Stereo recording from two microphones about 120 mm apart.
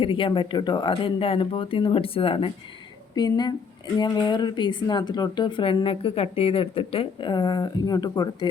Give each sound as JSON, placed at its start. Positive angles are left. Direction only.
{"t": 0.0, "sound": "speech", "side_deg": 45}
{"t": 3.2, "sound": "a woman's voice", "side_deg": 35}